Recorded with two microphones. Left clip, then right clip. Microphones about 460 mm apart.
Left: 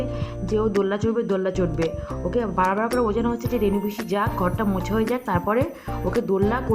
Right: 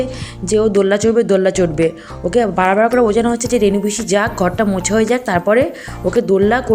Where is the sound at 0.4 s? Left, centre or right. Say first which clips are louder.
Right 9 dB; left.